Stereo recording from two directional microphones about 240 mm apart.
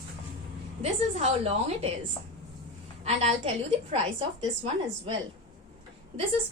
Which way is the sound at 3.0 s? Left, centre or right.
Right.